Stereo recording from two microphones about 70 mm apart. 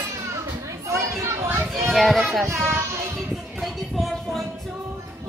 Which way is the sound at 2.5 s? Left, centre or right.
Right.